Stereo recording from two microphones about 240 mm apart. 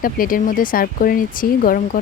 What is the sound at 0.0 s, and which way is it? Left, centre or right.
Speech, left.